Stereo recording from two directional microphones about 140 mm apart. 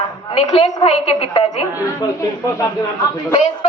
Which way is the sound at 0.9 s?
50° left (ahead or behind).